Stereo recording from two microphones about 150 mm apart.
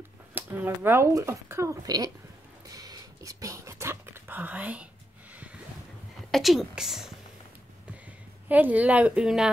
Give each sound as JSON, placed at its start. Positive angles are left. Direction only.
{"t": 0.3, "sound": "speech", "side_deg": -10}
{"t": 2.7, "sound": "a sound", "side_deg": -25}
{"t": 6.3, "sound": "a woman's voice", "side_deg": 0}
{"t": 8.5, "sound": "speech", "side_deg": -10}